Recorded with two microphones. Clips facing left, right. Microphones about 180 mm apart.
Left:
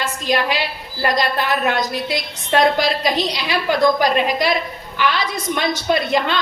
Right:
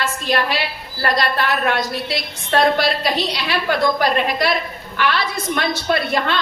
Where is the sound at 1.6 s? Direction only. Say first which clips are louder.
Left 1 dB; 15° left (ahead or behind).